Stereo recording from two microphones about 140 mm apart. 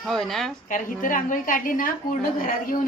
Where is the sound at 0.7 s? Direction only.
70° left (ahead or behind).